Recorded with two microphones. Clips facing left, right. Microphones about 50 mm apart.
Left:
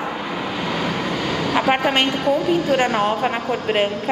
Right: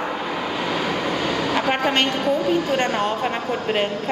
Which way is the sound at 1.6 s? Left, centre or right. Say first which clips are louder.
Left 4 dB; centre.